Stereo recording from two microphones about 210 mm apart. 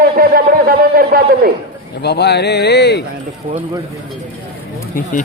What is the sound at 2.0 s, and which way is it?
Speech, 50° left (ahead or behind).